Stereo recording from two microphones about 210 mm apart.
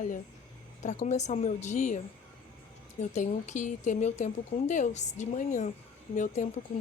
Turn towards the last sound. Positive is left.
turn(degrees=35)  # may be behind; listen again after turning